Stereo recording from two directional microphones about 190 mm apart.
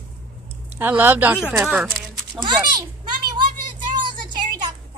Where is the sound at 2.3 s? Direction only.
25° right (ahead or behind).